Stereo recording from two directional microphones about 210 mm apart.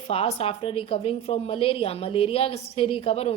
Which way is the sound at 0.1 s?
30° left (ahead or behind).